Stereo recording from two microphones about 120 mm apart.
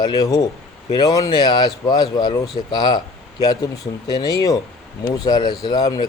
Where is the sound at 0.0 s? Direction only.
35° left (ahead or behind).